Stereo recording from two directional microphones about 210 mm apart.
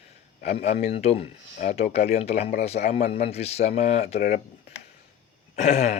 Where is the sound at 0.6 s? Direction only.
30° left (ahead or behind).